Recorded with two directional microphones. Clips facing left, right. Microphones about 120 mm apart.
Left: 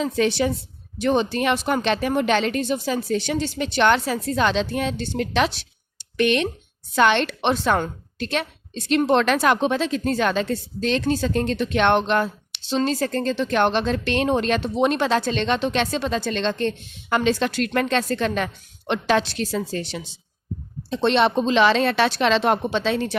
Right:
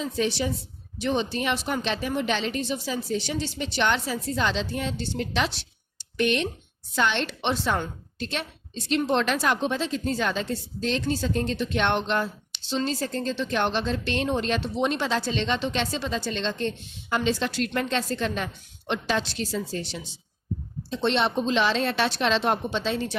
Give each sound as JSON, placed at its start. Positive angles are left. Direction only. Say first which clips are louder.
{"t": 0.0, "sound": "a woman's voice", "louder": "left 6 dB", "side_deg": 65}
{"t": 0.9, "sound": "a woman's voice", "louder": "left 5 dB", "side_deg": 50}
{"t": 6.0, "sound": "a sound", "louder": "left 4 dB", "side_deg": 75}
{"t": 6.9, "sound": "a woman's voice", "louder": "left 7 dB", "side_deg": 70}